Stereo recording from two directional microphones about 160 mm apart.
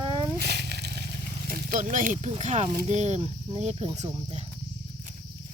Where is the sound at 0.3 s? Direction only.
75° right (ahead or behind).